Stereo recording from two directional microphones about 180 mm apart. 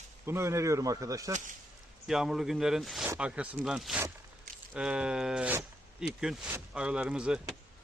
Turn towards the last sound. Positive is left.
turn(degrees=-5)  # may be behind; listen again after turning